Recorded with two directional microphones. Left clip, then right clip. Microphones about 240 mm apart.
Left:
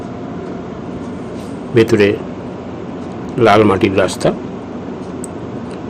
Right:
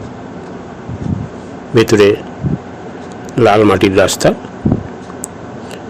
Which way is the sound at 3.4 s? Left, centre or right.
Right.